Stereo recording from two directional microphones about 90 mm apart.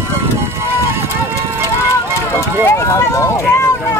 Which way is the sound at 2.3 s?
30° left (ahead or behind).